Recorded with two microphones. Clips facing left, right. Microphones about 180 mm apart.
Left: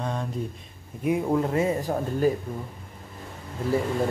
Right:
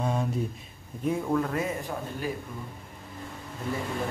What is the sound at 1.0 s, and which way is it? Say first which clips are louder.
Speech: left 3 dB; 20° left (ahead or behind).